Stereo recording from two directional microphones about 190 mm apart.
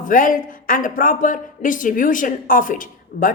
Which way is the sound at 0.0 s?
45° left (ahead or behind).